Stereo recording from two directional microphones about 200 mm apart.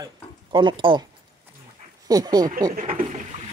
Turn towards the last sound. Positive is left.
turn(degrees=-45)  # may be behind; listen again after turning